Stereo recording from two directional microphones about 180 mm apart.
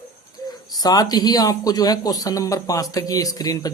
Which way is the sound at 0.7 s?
20° left (ahead or behind).